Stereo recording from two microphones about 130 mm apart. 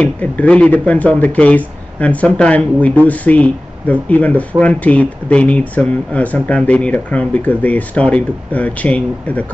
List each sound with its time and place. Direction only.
0.0 s speech: 10° left (ahead or behind)